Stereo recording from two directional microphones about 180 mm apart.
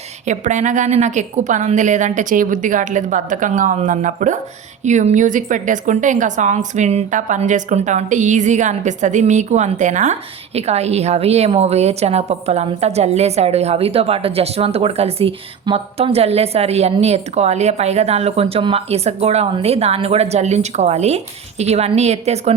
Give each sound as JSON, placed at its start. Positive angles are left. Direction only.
{"t": 0.3, "sound": "a woman's voice", "side_deg": -45}